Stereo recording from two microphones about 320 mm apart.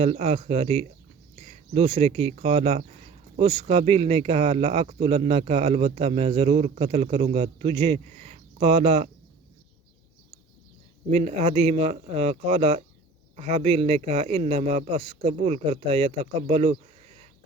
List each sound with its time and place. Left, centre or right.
0.0 s a man's voice: centre
11.1 s a man's voice: right